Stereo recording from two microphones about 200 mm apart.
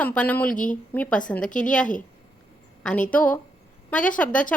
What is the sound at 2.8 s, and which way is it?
A woman's voice, 5° left (ahead or behind).